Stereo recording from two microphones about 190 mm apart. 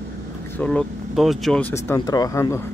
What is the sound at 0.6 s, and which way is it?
Speech, 5° left (ahead or behind).